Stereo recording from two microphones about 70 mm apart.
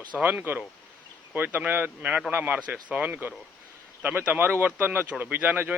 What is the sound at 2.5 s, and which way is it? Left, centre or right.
Speech, centre.